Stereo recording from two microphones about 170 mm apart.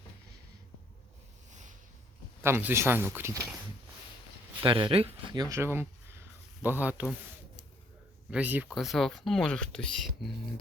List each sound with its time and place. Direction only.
1.5 s a sound: 45° right (ahead or behind)
2.4 s speech: 15° right (ahead or behind)
4.6 s speech: 30° right (ahead or behind); by 7.1 s 10° right (ahead or behind)
8.3 s speech: 10° right (ahead or behind)